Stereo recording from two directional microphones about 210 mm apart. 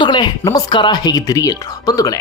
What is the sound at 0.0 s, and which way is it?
Speech, 20° left (ahead or behind).